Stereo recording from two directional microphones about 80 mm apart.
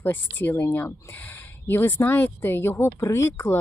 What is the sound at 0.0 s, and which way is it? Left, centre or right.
Speech, left.